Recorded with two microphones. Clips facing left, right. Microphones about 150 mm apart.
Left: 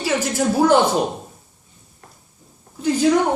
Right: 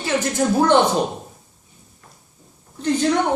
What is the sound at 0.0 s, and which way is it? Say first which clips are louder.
Speech: even; 5° left (ahead or behind).